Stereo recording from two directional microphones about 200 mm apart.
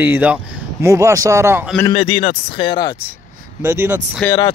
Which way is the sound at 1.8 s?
25° left (ahead or behind).